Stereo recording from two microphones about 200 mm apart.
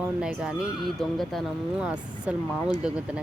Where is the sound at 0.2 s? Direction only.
5° right (ahead or behind).